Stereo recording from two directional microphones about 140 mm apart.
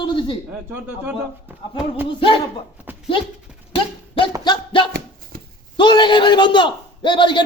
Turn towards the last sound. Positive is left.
turn(degrees=35)  # may be behind; listen again after turning